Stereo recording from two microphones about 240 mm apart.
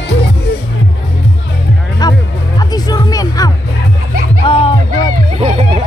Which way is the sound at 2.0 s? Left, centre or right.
Centre.